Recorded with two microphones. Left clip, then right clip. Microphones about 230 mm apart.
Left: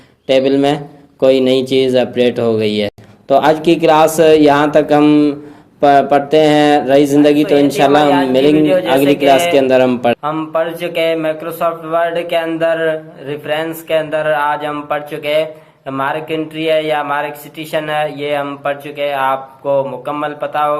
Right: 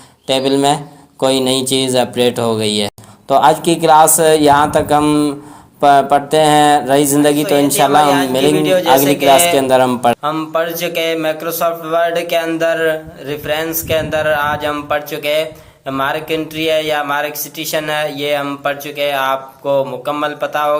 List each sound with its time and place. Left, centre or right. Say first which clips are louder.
0.3 s speech: left 1 dB; right
8.5 s a man's voice: left 1 dB; centre
8.8 s speech: even; right
10.2 s a man's voice: even; centre